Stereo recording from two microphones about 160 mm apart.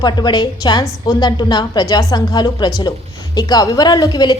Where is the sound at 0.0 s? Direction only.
25° left (ahead or behind).